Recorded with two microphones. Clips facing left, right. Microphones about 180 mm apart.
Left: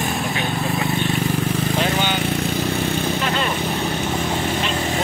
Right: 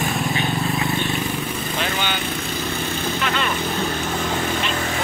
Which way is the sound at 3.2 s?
35° left (ahead or behind).